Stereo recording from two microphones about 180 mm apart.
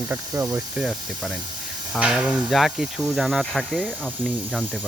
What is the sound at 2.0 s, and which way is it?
Speech, 5° right (ahead or behind).